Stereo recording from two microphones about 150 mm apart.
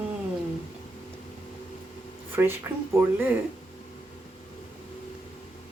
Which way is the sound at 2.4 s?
15° right (ahead or behind).